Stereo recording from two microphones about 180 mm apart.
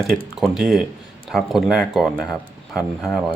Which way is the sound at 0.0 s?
Centre (ahead or behind).